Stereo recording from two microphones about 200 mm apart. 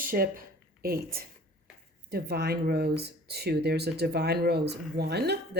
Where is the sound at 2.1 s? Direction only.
50° right (ahead or behind).